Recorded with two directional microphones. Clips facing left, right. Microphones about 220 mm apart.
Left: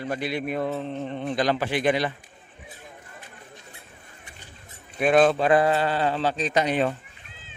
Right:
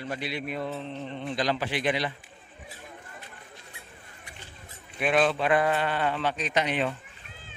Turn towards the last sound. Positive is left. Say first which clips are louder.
# left 4 dB
turn(degrees=40)  # may be behind; listen again after turning